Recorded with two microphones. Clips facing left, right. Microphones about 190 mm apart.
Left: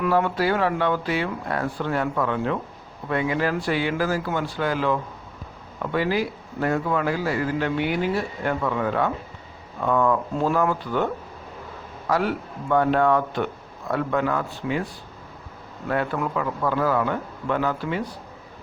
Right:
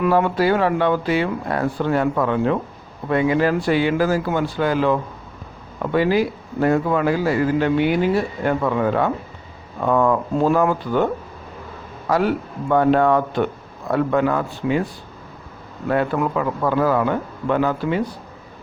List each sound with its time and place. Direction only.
0.0 s a man's voice: 20° right (ahead or behind)
16.1 s a man's voice: 35° right (ahead or behind)